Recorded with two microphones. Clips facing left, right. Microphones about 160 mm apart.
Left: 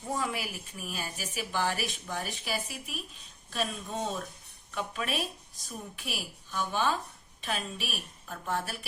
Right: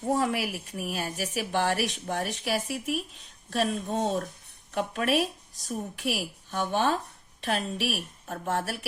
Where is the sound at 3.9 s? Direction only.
55° right (ahead or behind).